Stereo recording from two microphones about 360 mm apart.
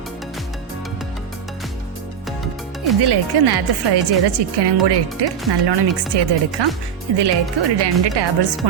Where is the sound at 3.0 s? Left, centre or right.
Right.